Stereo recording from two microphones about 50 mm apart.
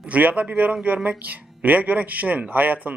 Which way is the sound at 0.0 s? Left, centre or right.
Right.